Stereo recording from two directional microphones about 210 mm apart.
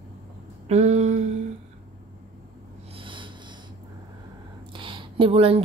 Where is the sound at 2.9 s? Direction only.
25° right (ahead or behind).